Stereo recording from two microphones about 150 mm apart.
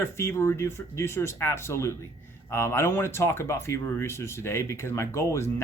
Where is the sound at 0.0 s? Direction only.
15° left (ahead or behind).